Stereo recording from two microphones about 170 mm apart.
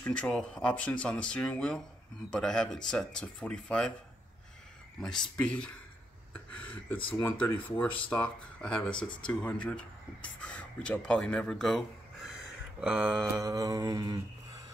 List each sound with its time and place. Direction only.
0.0 s speech: 5° left (ahead or behind)
5.0 s speech: 5° left (ahead or behind)
6.3 s a sound: 10° left (ahead or behind)
7.1 s speech: 10° left (ahead or behind)
12.8 s mantra: 10° right (ahead or behind)
13.3 s mantra: 20° right (ahead or behind)